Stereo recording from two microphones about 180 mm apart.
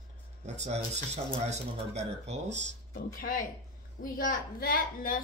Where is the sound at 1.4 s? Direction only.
40° right (ahead or behind).